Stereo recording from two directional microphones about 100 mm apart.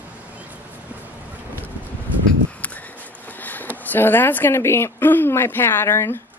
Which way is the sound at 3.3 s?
15° left (ahead or behind).